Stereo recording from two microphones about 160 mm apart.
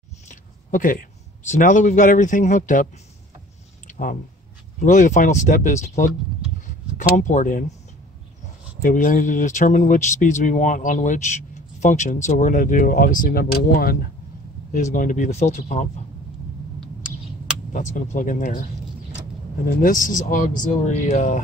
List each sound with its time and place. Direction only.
0.3 s speech: 55° left (ahead or behind)
3.8 s clicking: 55° left (ahead or behind)
4.7 s speech: 50° left (ahead or behind)
8.8 s speech: 60° left (ahead or behind)
14.7 s speech: 50° left (ahead or behind)
17.7 s speech: 55° left (ahead or behind)
19.6 s speech: 55° left (ahead or behind)